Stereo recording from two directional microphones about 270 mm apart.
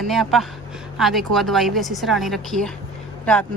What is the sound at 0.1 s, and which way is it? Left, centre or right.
Speech, centre.